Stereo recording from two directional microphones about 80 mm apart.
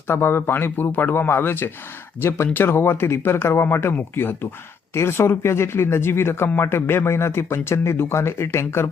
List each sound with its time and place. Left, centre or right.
0.1 s speech: left